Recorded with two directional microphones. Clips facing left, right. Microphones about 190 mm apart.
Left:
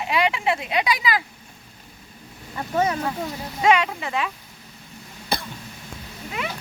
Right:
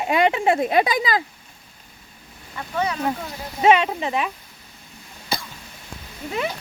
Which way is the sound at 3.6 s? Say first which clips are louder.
Right 3 dB; 20° right (ahead or behind).